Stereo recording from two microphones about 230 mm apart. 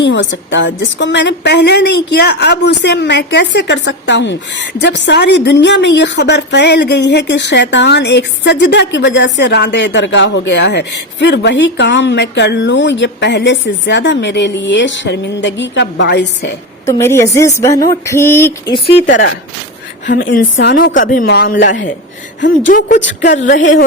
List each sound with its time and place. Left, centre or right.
0.0 s a woman's voice: left
16.8 s a woman's voice: centre
18.9 s a woman's voice: left
20.1 s a woman's voice: left
23.0 s a woman's voice: left
23.3 s a woman's voice: left